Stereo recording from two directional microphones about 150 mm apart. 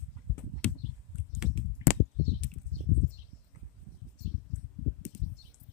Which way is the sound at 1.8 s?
20° right (ahead or behind).